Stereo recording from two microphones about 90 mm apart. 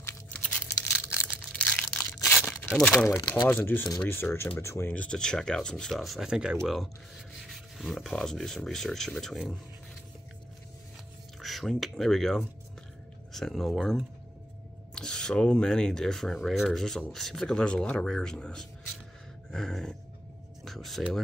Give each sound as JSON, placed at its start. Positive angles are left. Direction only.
{"t": 0.6, "sound": "tearing", "side_deg": 25}
{"t": 1.1, "sound": "crushing", "side_deg": -10}
{"t": 2.1, "sound": "tearing", "side_deg": 30}
{"t": 2.8, "sound": "speech", "side_deg": 10}
{"t": 3.1, "sound": "speech", "side_deg": 35}
{"t": 3.4, "sound": "speech", "side_deg": 25}
{"t": 4.9, "sound": "speech", "side_deg": 10}
{"t": 11.4, "sound": "speech", "side_deg": 0}